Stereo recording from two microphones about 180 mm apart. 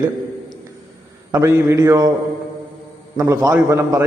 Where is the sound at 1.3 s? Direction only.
15° right (ahead or behind).